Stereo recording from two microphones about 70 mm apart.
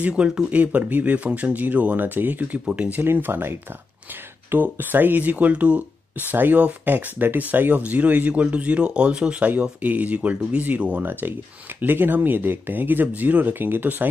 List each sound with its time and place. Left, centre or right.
0.0 s speech: centre
3.0 s speech: right